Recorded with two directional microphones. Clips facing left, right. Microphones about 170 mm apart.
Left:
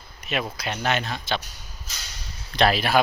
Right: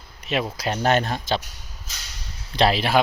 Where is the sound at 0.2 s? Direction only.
30° right (ahead or behind).